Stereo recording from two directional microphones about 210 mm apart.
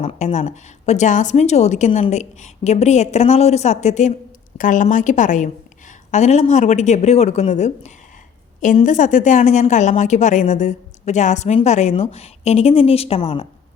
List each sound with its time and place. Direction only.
0.0 s a woman's voice: 30° left (ahead or behind)